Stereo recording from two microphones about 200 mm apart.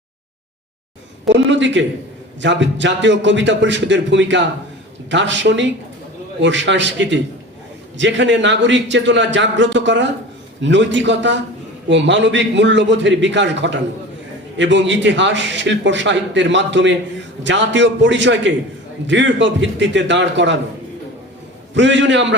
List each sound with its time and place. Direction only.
1.3 s a man's voice: 65° right (ahead or behind)
21.8 s a man's voice: 65° right (ahead or behind)